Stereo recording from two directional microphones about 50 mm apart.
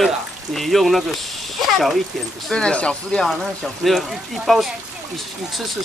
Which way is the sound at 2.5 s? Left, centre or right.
Left.